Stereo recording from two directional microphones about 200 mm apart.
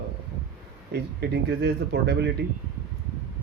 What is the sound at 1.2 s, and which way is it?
Speech, 60° right (ahead or behind).